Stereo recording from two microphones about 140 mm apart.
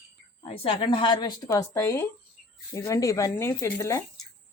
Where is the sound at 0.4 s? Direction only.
45° left (ahead or behind).